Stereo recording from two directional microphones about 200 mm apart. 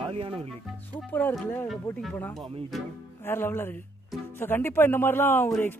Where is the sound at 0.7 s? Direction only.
10° left (ahead or behind).